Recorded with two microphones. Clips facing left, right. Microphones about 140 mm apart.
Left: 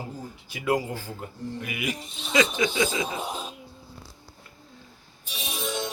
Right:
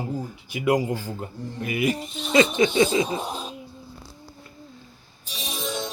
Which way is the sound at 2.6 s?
35° right (ahead or behind).